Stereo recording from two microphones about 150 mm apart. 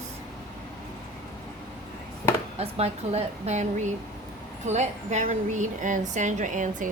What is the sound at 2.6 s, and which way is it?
A woman's voice, 45° right (ahead or behind).